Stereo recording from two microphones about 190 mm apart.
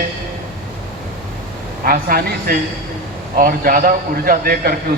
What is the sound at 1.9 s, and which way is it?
A man's voice, 50° right (ahead or behind).